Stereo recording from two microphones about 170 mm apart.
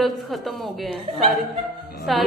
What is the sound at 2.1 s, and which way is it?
Music, centre (ahead or behind).